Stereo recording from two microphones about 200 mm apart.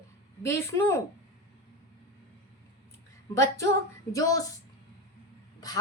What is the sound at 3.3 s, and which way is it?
Speech, 15° left (ahead or behind).